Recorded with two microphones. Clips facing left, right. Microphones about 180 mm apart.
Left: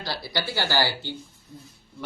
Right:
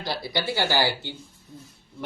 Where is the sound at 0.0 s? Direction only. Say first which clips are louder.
Right 2 dB; 20° right (ahead or behind).